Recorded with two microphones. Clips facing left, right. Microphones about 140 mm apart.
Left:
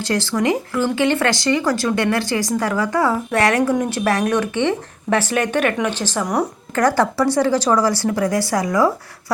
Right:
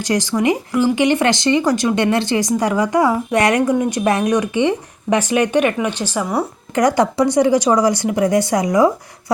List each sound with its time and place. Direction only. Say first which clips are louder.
0.0 s speech: right 2 dB; 15° right (ahead or behind)